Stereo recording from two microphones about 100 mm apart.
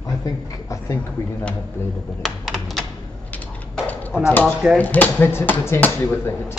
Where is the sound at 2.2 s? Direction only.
Centre (ahead or behind).